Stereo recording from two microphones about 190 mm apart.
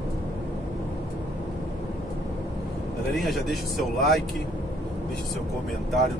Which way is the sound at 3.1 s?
Centre (ahead or behind).